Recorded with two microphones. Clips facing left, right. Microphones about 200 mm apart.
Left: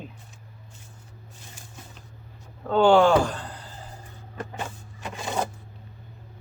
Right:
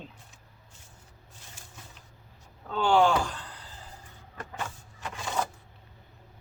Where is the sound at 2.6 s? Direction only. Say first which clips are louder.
Left 6 dB; 70° left (ahead or behind); by 3.5 s 50° left (ahead or behind).